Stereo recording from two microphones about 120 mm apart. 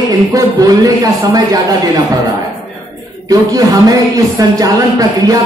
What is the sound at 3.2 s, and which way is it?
A man's voice, 30° right (ahead or behind).